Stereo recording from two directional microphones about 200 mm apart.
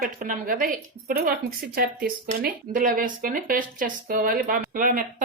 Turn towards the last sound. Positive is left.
turn(degrees=-45)  # may be behind; listen again after turning